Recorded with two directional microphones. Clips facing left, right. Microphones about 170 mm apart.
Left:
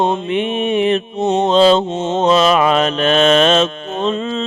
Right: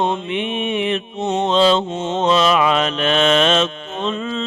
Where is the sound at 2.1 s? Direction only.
40° left (ahead or behind).